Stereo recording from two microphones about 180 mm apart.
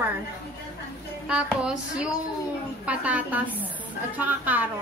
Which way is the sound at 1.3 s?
5° right (ahead or behind).